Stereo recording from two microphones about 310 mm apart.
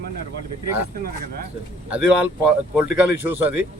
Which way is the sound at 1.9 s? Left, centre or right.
Centre.